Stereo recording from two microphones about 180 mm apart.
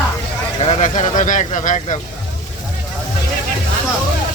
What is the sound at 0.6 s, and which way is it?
Speech, 35° left (ahead or behind).